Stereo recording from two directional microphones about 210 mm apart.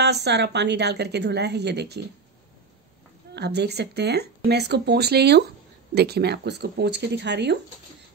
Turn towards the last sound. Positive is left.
turn(degrees=-55)  # may be behind; listen again after turning